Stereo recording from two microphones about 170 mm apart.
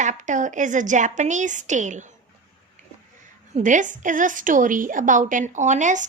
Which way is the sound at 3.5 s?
50° right (ahead or behind).